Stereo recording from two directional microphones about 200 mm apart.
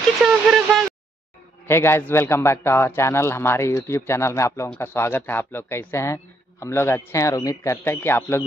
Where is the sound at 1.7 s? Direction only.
10° left (ahead or behind).